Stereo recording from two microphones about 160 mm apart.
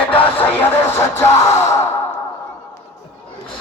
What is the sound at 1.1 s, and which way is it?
Music, 45° left (ahead or behind).